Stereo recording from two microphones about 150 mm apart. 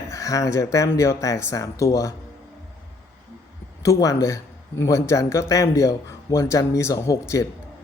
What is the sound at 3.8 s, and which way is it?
A man's voice, 20° left (ahead or behind).